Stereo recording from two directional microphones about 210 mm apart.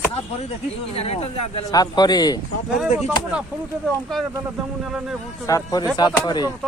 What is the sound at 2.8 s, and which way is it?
Speech, 5° right (ahead or behind).